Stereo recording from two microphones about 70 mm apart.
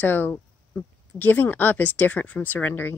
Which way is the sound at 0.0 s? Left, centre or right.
Left.